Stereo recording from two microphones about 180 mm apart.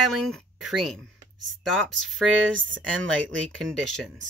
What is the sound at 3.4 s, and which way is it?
Speech, 5° left (ahead or behind).